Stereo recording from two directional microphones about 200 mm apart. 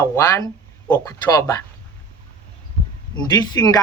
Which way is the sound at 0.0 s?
15° left (ahead or behind).